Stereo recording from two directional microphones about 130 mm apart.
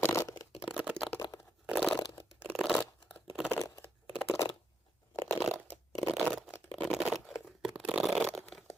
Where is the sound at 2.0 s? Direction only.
30° left (ahead or behind).